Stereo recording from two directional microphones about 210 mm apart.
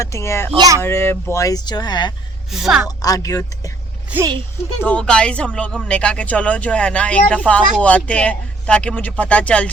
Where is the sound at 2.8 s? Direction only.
15° left (ahead or behind).